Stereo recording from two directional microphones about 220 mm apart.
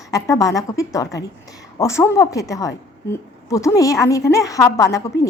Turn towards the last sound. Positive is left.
turn(degrees=15)  # may be behind; listen again after turning